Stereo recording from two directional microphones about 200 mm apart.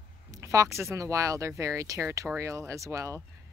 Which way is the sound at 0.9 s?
15° right (ahead or behind).